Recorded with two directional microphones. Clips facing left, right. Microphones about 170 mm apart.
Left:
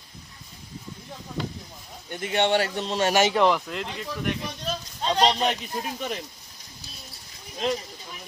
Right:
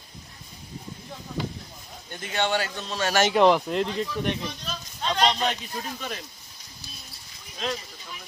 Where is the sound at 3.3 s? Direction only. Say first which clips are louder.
Right 3 dB; 25° right (ahead or behind).